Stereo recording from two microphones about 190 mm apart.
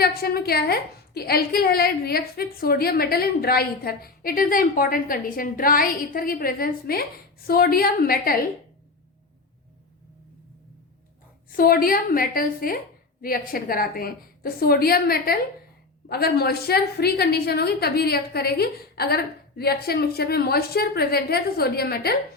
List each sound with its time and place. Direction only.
0.0 s a woman's voice: 55° left (ahead or behind)
11.5 s a woman's voice: 50° left (ahead or behind)